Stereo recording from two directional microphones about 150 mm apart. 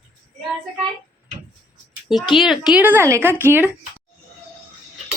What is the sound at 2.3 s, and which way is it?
A woman's voice, centre (ahead or behind).